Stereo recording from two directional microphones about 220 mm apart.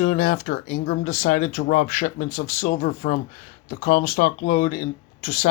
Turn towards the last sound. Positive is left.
turn(degrees=35)  # may be behind; listen again after turning